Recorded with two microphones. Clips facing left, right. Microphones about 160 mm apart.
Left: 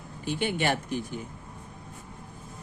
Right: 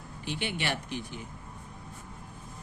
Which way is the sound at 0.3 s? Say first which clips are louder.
Left 6 dB; 45° left (ahead or behind).